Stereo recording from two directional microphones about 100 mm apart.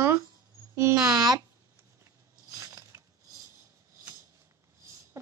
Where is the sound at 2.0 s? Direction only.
30° right (ahead or behind).